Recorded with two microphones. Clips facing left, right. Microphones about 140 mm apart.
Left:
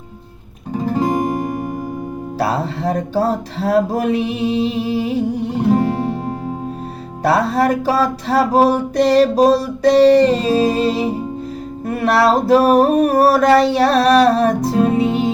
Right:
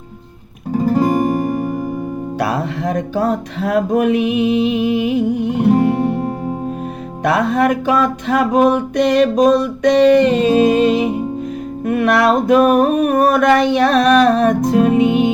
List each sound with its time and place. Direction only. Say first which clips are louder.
2.4 s music: left 1 dB; 30° left (ahead or behind)
7.3 s music: even; 35° left (ahead or behind)